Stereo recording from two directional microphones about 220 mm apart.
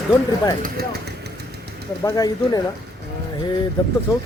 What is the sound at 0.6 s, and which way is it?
Speech, 45° right (ahead or behind).